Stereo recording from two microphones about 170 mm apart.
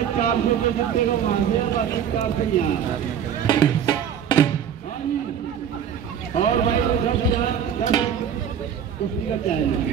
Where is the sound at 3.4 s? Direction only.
20° left (ahead or behind).